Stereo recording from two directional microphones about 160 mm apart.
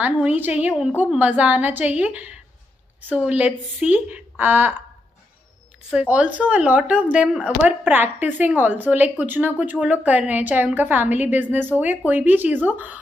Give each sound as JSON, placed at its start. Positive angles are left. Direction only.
{"t": 0.0, "sound": "a woman's voice", "side_deg": -10}
{"t": 5.9, "sound": "a woman's voice", "side_deg": -5}